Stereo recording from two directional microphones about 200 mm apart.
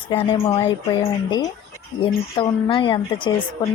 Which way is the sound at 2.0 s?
25° left (ahead or behind).